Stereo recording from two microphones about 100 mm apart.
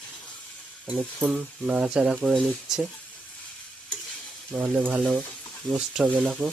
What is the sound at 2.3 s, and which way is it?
Speech, 5° left (ahead or behind).